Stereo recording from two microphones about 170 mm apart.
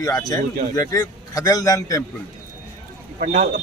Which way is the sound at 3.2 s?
45° right (ahead or behind).